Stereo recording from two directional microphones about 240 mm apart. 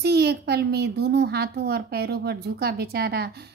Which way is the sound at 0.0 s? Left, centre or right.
Right.